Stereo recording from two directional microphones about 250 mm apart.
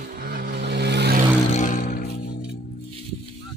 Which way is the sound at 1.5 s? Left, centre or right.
Left.